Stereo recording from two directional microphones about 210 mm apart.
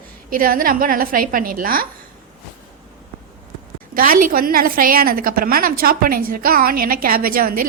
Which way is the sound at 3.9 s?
40° right (ahead or behind).